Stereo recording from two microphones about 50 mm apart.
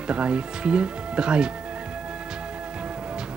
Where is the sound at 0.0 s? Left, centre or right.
Right.